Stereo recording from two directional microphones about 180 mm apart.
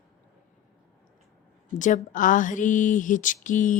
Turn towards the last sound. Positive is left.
turn(degrees=45)  # may be behind; listen again after turning